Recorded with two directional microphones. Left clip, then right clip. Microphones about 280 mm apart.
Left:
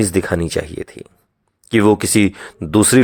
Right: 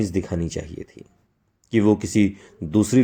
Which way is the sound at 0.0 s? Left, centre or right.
Left.